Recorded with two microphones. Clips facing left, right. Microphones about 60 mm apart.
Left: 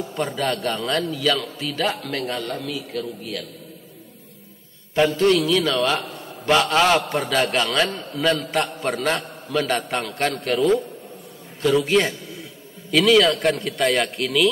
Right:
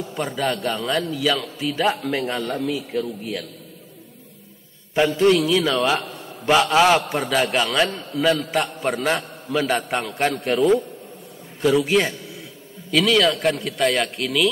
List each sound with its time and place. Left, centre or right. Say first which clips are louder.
0.1 s a man's voice: right 1 dB; centre; by 3.4 s right
4.9 s a man's voice: right 1 dB; centre